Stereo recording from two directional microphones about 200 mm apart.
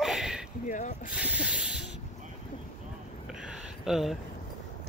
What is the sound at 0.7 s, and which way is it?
Speech, 40° left (ahead or behind).